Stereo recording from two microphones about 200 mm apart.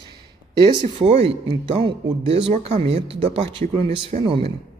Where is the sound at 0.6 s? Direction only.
25° right (ahead or behind).